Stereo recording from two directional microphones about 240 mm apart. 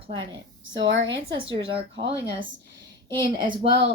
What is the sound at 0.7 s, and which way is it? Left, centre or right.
Speech, right.